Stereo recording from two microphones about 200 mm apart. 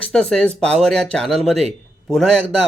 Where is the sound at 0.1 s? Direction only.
5° left (ahead or behind).